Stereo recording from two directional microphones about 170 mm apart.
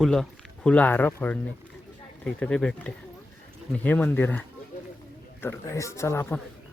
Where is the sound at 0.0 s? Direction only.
5° left (ahead or behind).